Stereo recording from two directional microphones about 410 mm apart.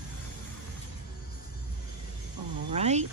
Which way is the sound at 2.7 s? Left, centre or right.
Centre.